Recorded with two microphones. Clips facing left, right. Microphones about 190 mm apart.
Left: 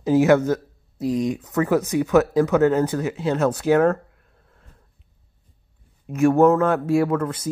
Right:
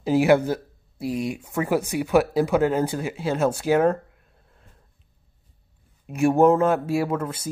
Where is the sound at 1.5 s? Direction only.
10° right (ahead or behind).